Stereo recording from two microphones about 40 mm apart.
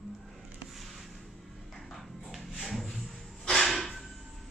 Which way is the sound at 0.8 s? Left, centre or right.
Centre.